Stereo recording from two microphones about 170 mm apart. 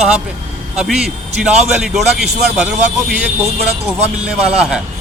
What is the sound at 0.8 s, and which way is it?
A man's voice, centre (ahead or behind).